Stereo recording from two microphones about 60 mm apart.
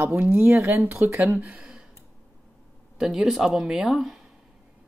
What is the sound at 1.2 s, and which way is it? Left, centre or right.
Speech, right.